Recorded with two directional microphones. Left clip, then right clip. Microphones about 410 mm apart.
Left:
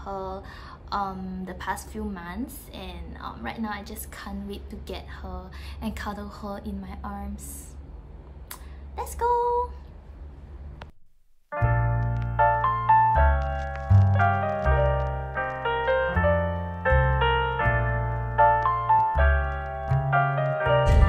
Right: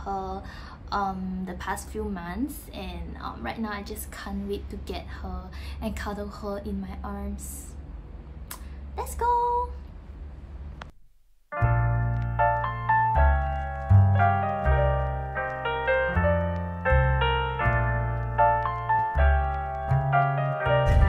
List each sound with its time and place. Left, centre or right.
0.0 s a woman's voice: centre
8.5 s a sound: centre
11.5 s music: centre